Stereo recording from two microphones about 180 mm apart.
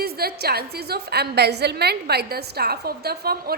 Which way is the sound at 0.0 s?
60° right (ahead or behind).